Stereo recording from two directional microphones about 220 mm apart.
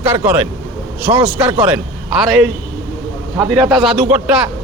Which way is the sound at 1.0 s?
25° right (ahead or behind).